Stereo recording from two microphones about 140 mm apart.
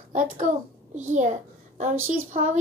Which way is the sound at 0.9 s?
60° right (ahead or behind).